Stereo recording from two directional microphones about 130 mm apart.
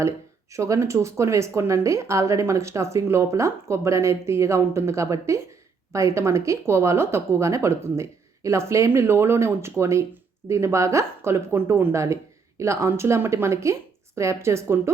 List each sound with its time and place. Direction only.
0.5 s speech: 25° right (ahead or behind)